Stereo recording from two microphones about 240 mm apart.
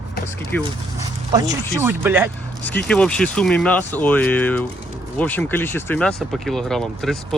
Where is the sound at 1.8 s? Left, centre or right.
Centre.